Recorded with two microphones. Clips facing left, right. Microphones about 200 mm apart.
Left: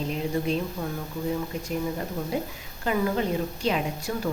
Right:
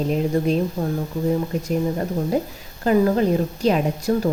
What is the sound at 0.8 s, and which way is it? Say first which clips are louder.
Speech: right 7 dB; 30° right (ahead or behind).